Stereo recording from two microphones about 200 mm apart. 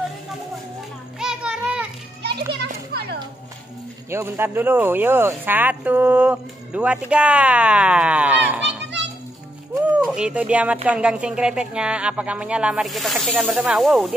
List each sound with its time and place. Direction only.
1.2 s music: 5° right (ahead or behind)
2.5 s children playing: 55° right (ahead or behind)
4.1 s a woman's voice: 10° right (ahead or behind)
9.8 s a woman's voice: 5° right (ahead or behind)